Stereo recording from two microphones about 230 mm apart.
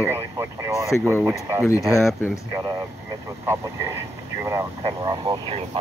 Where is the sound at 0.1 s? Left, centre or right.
Centre.